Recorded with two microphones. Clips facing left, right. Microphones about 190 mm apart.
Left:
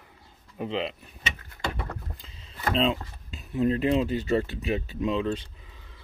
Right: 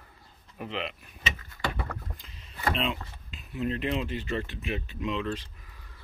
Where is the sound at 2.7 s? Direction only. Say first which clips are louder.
Left 6 dB; 30° left (ahead or behind).